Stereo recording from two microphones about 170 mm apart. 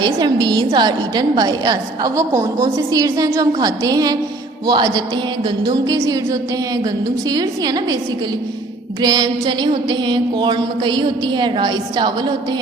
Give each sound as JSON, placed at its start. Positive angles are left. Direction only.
{"t": 0.0, "sound": "a woman's voice", "side_deg": -25}
{"t": 9.0, "sound": "a woman's voice", "side_deg": -25}